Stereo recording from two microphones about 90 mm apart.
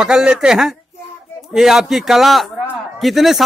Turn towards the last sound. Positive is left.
turn(degrees=0)  # may be behind; listen again after turning